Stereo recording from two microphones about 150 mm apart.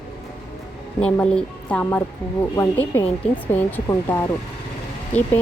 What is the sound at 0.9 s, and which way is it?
A woman's voice, 10° left (ahead or behind).